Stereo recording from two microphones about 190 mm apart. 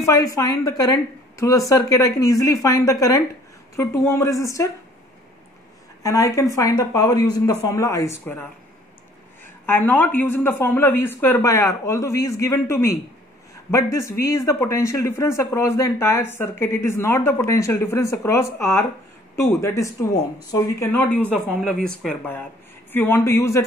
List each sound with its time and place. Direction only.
0.0 s speech: 15° left (ahead or behind)
6.0 s speech: 15° left (ahead or behind)
13.9 s speech: 15° left (ahead or behind)